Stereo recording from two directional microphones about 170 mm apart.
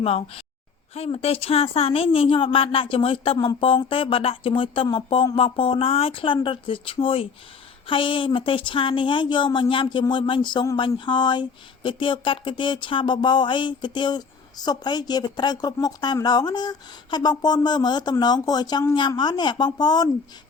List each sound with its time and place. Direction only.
0.0 s a woman's voice: 35° left (ahead or behind)